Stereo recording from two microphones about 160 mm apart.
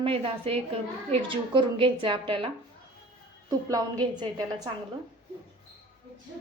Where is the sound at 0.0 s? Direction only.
35° right (ahead or behind).